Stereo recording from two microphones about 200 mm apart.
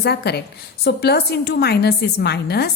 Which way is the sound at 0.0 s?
55° left (ahead or behind).